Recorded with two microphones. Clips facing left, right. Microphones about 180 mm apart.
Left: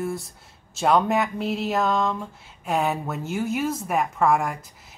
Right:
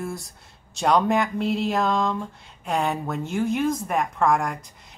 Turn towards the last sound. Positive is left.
turn(degrees=5)  # may be behind; listen again after turning